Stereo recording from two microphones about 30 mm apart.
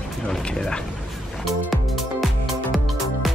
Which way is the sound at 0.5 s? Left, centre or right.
Left.